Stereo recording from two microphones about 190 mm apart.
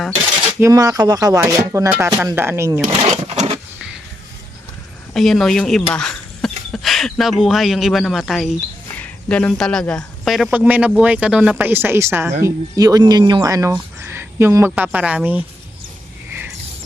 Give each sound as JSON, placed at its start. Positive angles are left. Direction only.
{"t": 0.6, "sound": "speech", "side_deg": -20}
{"t": 2.9, "sound": "a sound", "side_deg": -35}
{"t": 5.1, "sound": "speech", "side_deg": 0}